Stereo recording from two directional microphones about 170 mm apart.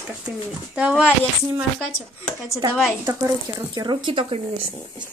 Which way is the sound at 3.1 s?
25° right (ahead or behind).